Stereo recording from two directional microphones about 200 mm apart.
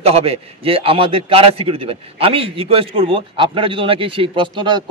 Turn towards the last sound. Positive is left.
turn(degrees=-25)  # may be behind; listen again after turning